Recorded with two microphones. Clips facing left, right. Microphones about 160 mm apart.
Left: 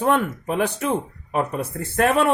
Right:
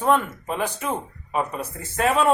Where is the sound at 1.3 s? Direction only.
60° left (ahead or behind).